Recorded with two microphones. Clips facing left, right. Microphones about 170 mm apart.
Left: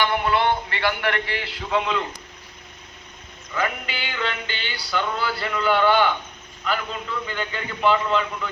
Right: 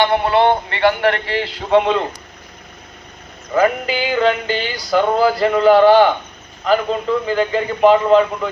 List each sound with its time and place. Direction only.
0.0 s music: 30° right (ahead or behind)
3.5 s music: 40° right (ahead or behind)